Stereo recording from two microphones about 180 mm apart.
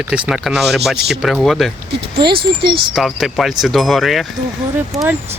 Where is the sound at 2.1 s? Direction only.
30° right (ahead or behind).